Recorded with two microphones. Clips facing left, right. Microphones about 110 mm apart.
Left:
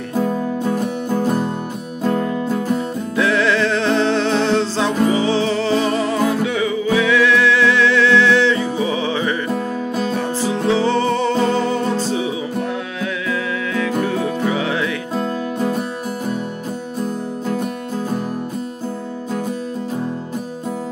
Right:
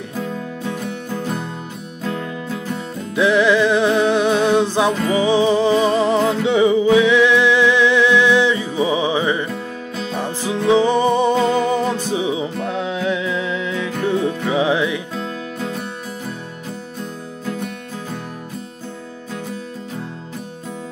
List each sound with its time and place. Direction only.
0.1 s music: 35° left (ahead or behind)
3.2 s music: 15° right (ahead or behind)
9.5 s music: 45° left (ahead or behind)
10.1 s music: 15° right (ahead or behind)
15.1 s music: 45° left (ahead or behind)
17.0 s music: 40° left (ahead or behind)